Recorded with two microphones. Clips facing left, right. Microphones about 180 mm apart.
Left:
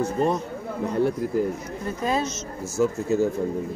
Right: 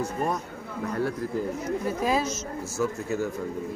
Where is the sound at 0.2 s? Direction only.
25° left (ahead or behind).